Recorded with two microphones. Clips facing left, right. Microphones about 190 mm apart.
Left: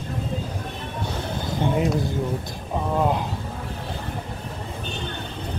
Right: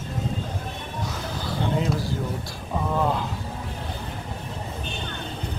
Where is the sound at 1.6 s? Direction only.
20° left (ahead or behind).